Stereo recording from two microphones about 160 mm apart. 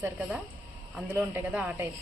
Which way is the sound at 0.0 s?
10° right (ahead or behind).